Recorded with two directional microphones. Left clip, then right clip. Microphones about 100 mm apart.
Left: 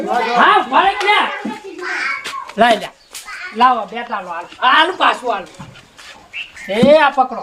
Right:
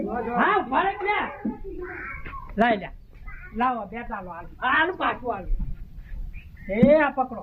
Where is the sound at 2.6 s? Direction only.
45° left (ahead or behind).